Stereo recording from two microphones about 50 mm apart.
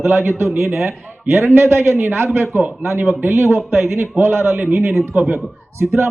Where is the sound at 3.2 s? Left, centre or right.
Right.